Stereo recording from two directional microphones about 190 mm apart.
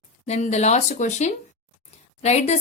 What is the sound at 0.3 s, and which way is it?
Speech, 35° left (ahead or behind).